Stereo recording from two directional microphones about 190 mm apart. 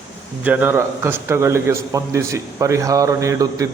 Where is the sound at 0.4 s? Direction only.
10° right (ahead or behind).